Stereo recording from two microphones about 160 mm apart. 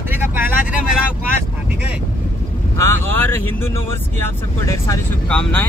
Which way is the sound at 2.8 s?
15° left (ahead or behind).